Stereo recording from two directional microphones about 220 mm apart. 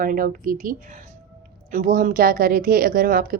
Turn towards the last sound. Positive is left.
turn(degrees=-40)  # may be behind; listen again after turning